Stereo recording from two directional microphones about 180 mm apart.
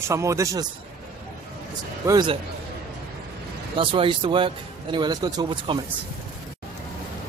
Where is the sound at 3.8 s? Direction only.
30° right (ahead or behind).